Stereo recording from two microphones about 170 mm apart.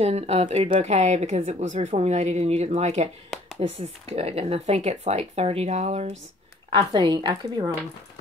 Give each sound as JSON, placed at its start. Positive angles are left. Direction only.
{"t": 0.0, "sound": "speech", "side_deg": -40}
{"t": 6.7, "sound": "a woman's voice", "side_deg": -25}